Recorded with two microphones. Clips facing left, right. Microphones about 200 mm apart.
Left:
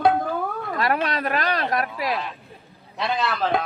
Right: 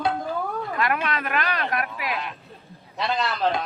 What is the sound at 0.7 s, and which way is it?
Speech, 35° left (ahead or behind).